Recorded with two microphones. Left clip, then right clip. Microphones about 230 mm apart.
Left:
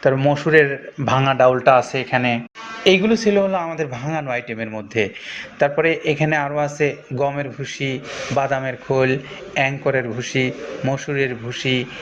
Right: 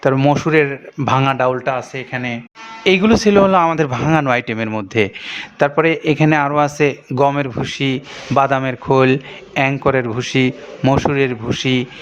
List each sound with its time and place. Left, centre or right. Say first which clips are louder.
0.0 s speech: right 2 dB; right
1.6 s speech: left 6 dB; centre
2.8 s a man's voice: right 2 dB; right